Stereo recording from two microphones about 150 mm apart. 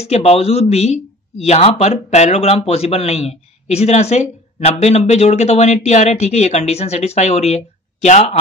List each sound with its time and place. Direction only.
0.0 s speech: 45° left (ahead or behind)